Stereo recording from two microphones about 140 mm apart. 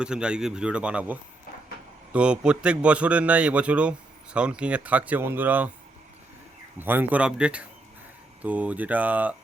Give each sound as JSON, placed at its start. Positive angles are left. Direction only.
{"t": 0.0, "sound": "a man's voice", "side_deg": -5}
{"t": 6.7, "sound": "a man's voice", "side_deg": -15}